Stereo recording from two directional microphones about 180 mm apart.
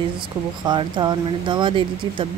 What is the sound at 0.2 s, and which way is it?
Speech, 25° right (ahead or behind).